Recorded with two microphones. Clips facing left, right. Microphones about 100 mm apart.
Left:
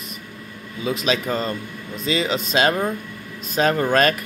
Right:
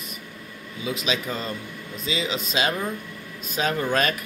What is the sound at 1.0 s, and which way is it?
Speech, 45° left (ahead or behind).